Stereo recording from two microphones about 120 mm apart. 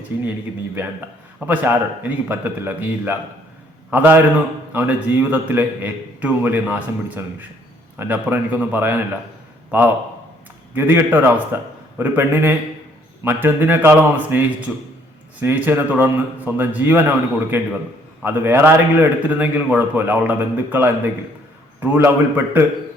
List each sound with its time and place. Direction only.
0.1 s a man's voice: 15° right (ahead or behind)
1.4 s a man's voice: 15° right (ahead or behind)
10.8 s a man's voice: 15° right (ahead or behind)